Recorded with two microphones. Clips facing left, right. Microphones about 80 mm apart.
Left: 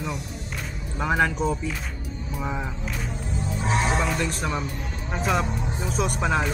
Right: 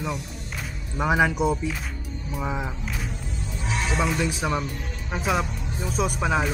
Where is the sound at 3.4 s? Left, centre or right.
Left.